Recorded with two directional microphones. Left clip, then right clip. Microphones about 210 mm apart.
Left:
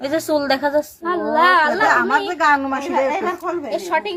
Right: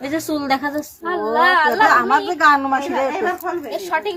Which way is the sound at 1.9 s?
25° left (ahead or behind).